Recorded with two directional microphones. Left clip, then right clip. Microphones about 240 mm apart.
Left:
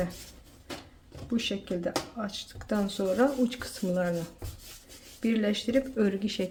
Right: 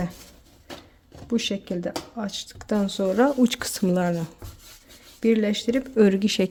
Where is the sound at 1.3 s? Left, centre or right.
Right.